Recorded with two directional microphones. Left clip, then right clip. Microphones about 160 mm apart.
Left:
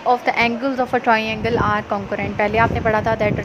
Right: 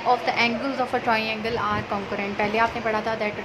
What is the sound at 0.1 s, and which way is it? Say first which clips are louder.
A woman's voice: left 4 dB; 30° left (ahead or behind).